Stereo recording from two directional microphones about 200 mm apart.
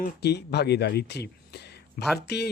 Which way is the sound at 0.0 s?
55° left (ahead or behind).